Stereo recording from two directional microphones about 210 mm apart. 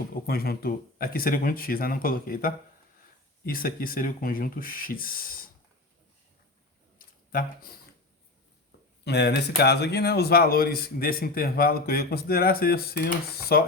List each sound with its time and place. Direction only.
0.1 s speech: 45° left (ahead or behind)
7.0 s a sound: 40° left (ahead or behind)
9.0 s speech: 55° left (ahead or behind)